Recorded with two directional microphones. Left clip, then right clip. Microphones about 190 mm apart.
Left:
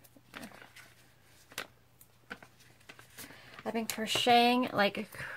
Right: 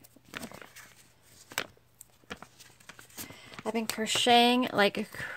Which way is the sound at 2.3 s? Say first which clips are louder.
Right 3 dB; 50° right (ahead or behind).